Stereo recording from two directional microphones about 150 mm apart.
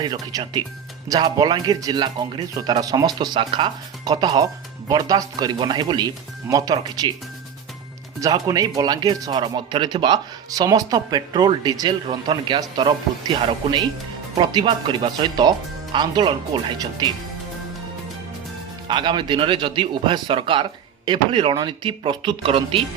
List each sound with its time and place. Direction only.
0.0 s speech: 30° right (ahead or behind)
8.2 s a man's voice: 25° right (ahead or behind)
18.9 s a man's voice: 30° right (ahead or behind)